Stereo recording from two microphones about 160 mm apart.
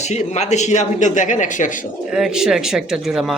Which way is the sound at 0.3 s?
45° left (ahead or behind).